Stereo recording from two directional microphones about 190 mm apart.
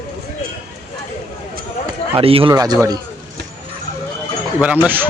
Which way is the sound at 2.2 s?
30° right (ahead or behind).